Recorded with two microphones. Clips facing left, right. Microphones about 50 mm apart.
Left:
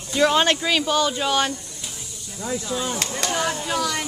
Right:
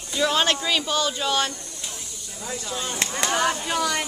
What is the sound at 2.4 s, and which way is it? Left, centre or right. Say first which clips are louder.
Speech: left 5 dB; centre.